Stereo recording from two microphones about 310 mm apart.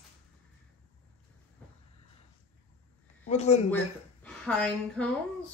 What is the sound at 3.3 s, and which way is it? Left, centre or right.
Speech, left.